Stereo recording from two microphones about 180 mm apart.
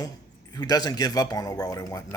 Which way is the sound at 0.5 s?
20° left (ahead or behind).